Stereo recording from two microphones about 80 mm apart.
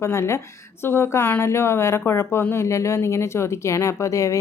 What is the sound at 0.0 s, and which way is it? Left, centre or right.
Speech, left.